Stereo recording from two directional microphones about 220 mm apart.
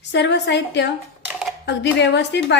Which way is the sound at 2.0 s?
50° left (ahead or behind).